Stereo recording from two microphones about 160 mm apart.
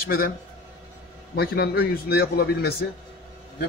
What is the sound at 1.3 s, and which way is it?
A man's voice, 80° left.